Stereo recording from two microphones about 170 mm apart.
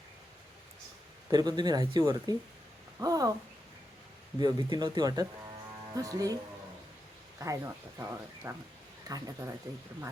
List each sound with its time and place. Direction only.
1.3 s speech: 25° right (ahead or behind)
4.4 s speech: 25° right (ahead or behind)